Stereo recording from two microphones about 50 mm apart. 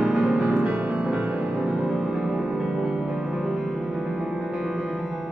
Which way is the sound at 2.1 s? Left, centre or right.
Centre.